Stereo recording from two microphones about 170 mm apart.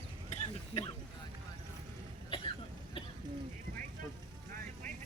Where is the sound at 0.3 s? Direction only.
40° left (ahead or behind).